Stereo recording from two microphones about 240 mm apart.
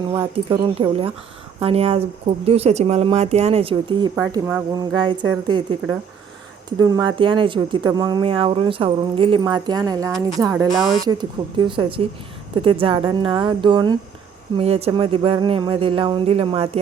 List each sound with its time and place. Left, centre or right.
0.1 s speech: right
4.1 s speech: centre
6.7 s speech: centre
10.7 s speech: centre
11.0 s speech: centre